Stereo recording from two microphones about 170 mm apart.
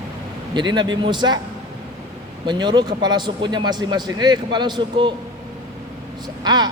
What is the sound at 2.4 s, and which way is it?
A man's voice, 25° right (ahead or behind).